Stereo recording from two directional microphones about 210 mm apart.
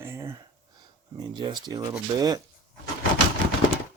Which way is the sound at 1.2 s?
20° right (ahead or behind).